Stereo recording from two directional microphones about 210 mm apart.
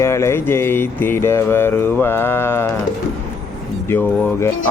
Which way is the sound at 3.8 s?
10° left (ahead or behind).